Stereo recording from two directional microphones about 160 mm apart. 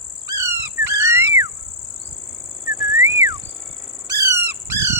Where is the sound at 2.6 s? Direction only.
15° right (ahead or behind).